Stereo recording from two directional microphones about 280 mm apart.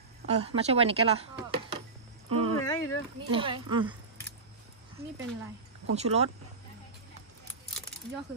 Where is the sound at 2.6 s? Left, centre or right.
Centre.